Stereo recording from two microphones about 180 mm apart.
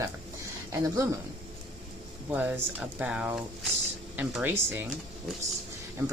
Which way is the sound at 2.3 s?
10° right (ahead or behind).